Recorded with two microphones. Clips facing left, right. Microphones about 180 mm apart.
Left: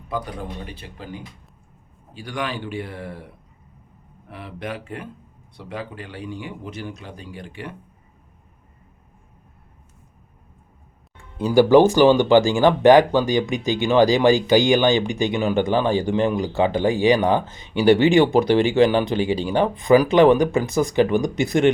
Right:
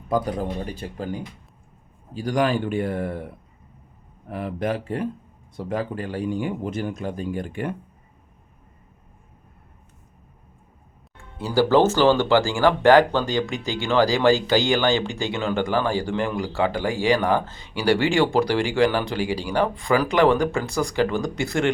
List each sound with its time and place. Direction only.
0.1 s speech: 40° right (ahead or behind)
11.3 s speech: 15° left (ahead or behind)